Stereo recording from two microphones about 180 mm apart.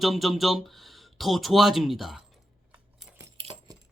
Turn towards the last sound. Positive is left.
turn(degrees=-30)  # may be behind; listen again after turning